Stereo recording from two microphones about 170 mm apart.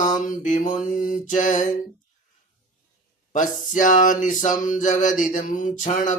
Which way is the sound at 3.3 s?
50° left (ahead or behind).